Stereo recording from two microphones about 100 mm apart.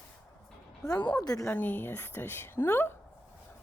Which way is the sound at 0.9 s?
50° left (ahead or behind).